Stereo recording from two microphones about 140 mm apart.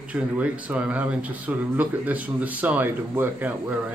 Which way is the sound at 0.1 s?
10° right (ahead or behind).